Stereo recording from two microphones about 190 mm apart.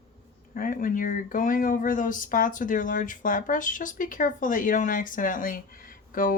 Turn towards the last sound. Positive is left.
turn(degrees=45)  # may be behind; listen again after turning